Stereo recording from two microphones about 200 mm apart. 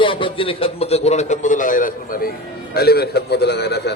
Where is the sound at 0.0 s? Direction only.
25° left (ahead or behind).